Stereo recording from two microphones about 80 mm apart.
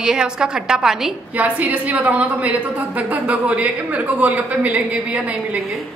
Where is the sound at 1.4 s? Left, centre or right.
Right.